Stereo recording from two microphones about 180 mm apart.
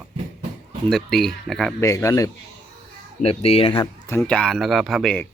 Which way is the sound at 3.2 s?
35° left (ahead or behind).